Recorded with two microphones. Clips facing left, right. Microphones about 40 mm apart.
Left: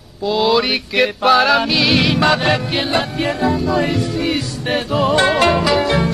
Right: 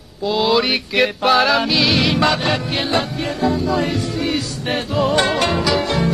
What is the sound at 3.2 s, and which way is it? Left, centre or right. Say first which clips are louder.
Music: left 2 dB; left.